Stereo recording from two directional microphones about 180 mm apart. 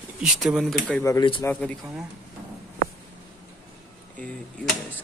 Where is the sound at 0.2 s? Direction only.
Centre (ahead or behind).